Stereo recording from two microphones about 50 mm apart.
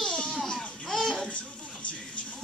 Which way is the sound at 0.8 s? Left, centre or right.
Centre.